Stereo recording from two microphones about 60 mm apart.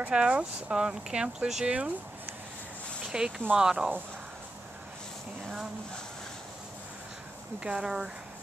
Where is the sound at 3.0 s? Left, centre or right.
Centre.